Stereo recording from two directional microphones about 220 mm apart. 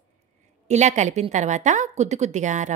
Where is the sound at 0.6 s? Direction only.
30° right (ahead or behind).